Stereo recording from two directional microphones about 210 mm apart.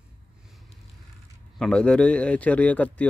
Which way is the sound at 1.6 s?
5° left (ahead or behind).